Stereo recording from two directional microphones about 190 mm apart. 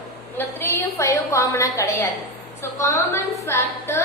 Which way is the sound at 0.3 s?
10° left (ahead or behind).